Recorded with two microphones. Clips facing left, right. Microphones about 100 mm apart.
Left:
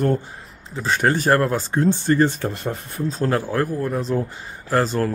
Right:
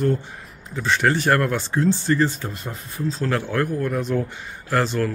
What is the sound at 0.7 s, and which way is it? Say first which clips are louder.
Speech: even; 35° left (ahead or behind).